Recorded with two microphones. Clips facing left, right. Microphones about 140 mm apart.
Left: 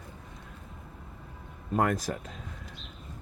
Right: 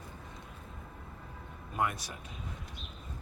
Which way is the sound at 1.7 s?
45° left (ahead or behind).